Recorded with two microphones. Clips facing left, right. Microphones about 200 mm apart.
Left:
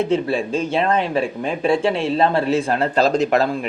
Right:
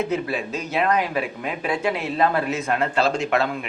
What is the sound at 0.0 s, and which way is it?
A man's voice, 30° left (ahead or behind).